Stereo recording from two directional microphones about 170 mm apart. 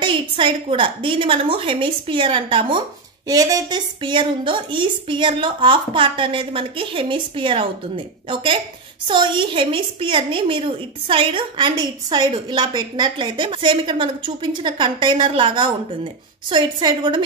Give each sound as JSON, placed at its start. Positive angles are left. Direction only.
{"t": 0.0, "sound": "a woman's voice", "side_deg": -30}